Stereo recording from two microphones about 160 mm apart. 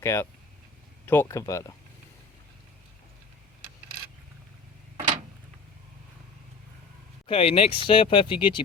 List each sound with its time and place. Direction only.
0.0 s speech: 15° left (ahead or behind)
4.9 s a sound: 50° right (ahead or behind)
7.3 s speech: 35° left (ahead or behind)